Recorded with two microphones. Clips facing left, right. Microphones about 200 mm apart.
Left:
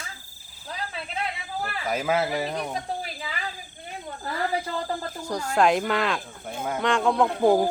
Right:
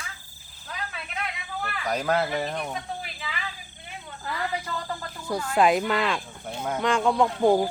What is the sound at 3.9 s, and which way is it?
Cricket, 40° left (ahead or behind).